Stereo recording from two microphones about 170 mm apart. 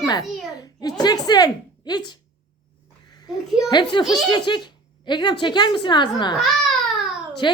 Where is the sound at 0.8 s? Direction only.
25° left (ahead or behind).